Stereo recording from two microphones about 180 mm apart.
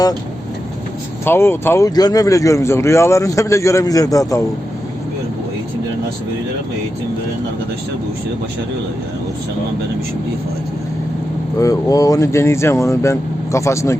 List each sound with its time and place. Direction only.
1.2 s speech: 10° left (ahead or behind)
11.6 s speech: 20° left (ahead or behind)